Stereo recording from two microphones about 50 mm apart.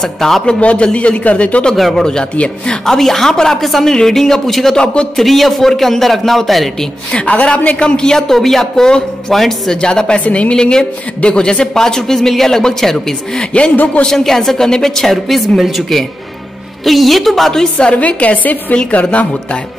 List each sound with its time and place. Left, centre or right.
0.0 s a man's voice: centre
0.5 s a woman's voice: left
1.7 s a man's voice: centre
2.3 s a woman's voice: left
2.7 s a man's voice: centre
7.2 s a man's voice: left; by 9.8 s centre
9.8 s a man's voice: centre
10.2 s a woman's voice: left
10.5 s a man's voice: centre
13.5 s a woman's voice: left
14.0 s a man's voice: centre
17.9 s a woman's voice: left